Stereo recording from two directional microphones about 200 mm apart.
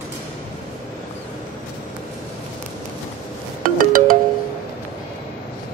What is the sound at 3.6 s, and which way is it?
Music, 45° right (ahead or behind).